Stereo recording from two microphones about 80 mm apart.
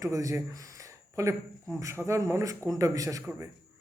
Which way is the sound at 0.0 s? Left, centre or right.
Right.